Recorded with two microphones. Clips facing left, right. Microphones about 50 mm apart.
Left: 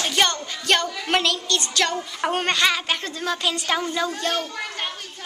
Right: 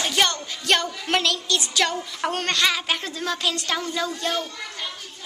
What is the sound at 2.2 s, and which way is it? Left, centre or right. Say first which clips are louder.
A woman's voice: left 2 dB; centre.